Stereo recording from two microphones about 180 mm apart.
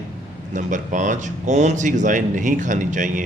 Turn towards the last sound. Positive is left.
turn(degrees=-45)  # may be behind; listen again after turning